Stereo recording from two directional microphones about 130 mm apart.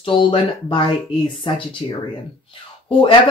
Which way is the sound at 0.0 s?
40° left (ahead or behind).